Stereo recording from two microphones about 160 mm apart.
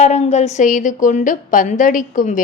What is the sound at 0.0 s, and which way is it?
A woman's voice, 45° left (ahead or behind).